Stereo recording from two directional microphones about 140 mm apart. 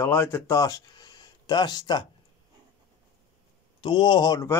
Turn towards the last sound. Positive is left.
turn(degrees=25)  # may be behind; listen again after turning